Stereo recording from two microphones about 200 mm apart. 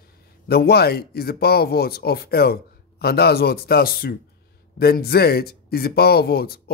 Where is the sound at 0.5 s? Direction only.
50° left (ahead or behind).